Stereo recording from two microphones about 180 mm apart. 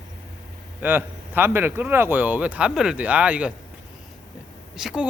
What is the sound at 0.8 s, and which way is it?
A man's voice, 10° right (ahead or behind).